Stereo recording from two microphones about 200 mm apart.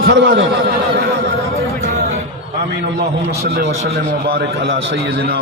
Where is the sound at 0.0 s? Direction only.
50° right (ahead or behind).